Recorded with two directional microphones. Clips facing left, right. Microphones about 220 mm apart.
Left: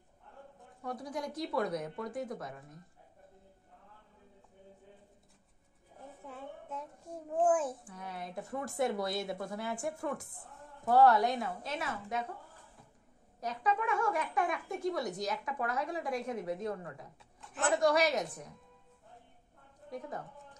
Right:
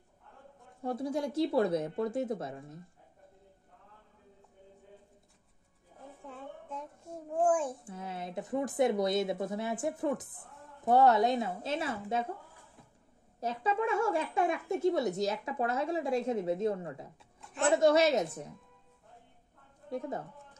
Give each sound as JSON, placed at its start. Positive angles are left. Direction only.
{"t": 0.8, "sound": "speech", "side_deg": -25}
{"t": 6.2, "sound": "a sound", "side_deg": 0}
{"t": 7.2, "sound": "a child's voice", "side_deg": 5}
{"t": 7.8, "sound": "speech", "side_deg": -25}
{"t": 13.4, "sound": "speech", "side_deg": -25}
{"t": 17.4, "sound": "a sound", "side_deg": 0}
{"t": 17.6, "sound": "speech", "side_deg": -25}
{"t": 19.9, "sound": "speech", "side_deg": -25}